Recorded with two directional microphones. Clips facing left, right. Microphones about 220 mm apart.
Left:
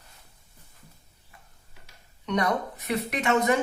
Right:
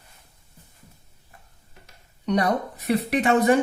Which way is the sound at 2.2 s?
35° right (ahead or behind).